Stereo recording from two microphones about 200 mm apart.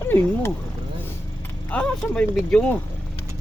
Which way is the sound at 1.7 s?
5° left (ahead or behind).